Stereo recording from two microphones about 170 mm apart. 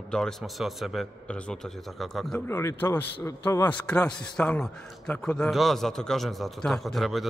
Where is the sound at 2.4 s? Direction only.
15° left (ahead or behind).